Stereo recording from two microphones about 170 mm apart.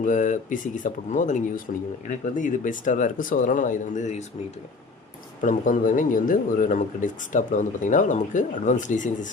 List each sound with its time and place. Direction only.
0.0 s speech: 50° left (ahead or behind)
5.4 s speech: 50° left (ahead or behind)